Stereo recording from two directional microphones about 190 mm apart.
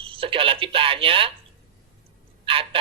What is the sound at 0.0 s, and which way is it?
Telephone, 30° right (ahead or behind).